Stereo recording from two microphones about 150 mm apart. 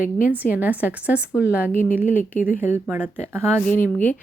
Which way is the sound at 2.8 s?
15° right (ahead or behind).